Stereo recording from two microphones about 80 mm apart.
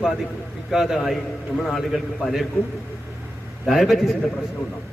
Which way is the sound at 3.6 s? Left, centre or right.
Centre.